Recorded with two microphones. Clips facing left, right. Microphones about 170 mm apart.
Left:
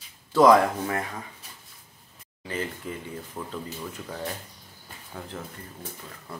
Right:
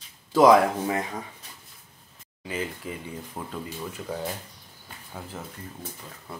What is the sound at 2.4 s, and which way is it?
Speech, 10° right (ahead or behind).